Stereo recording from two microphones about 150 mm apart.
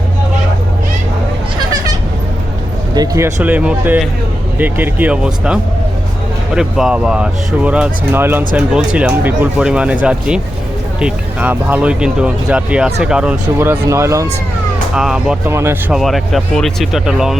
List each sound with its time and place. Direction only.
2.9 s speech: 25° right (ahead or behind); by 13.3 s 5° right (ahead or behind)
13.6 s speech: 15° right (ahead or behind)
14.9 s speech: 5° right (ahead or behind)
15.4 s speech: 15° right (ahead or behind)
15.9 s speech: centre (ahead or behind)